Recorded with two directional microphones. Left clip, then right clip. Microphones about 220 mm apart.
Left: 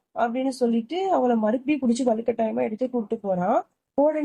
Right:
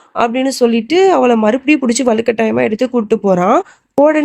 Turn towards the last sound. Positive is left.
turn(degrees=-55)  # may be behind; listen again after turning